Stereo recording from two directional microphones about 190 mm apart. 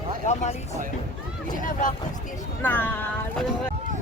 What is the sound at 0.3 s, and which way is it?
Speech, 35° left (ahead or behind).